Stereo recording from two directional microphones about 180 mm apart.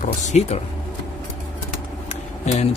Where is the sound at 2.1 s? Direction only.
40° left (ahead or behind).